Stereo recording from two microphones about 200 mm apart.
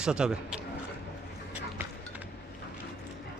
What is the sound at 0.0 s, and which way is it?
Speech, 5° right (ahead or behind).